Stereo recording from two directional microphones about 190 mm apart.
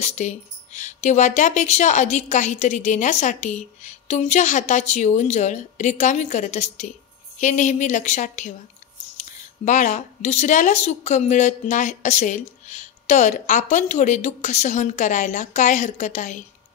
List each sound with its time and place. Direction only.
0.0 s speech: 40° left (ahead or behind)